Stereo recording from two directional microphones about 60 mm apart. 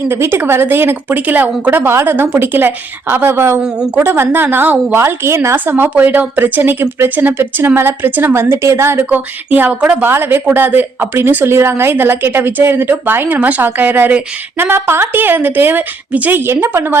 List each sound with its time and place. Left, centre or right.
0.1 s speech: right
1.0 s speech: right
5.5 s speech: right
9.0 s speech: right
16.4 s speech: right